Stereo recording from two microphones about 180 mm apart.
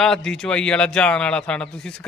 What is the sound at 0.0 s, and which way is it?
A man's voice, 5° left (ahead or behind).